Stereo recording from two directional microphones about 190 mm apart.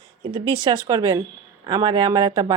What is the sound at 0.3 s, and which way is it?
Speech, 25° right (ahead or behind).